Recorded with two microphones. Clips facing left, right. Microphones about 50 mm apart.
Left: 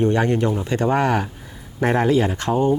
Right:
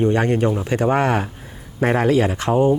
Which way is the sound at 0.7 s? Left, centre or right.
Right.